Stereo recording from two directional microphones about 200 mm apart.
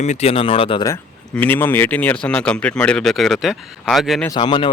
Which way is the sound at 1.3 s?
10° left (ahead or behind).